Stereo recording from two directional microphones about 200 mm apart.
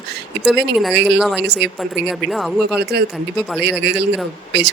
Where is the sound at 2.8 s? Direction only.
55° right (ahead or behind).